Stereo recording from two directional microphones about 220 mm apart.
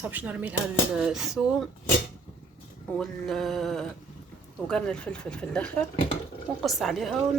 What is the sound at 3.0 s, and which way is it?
Speech, centre (ahead or behind).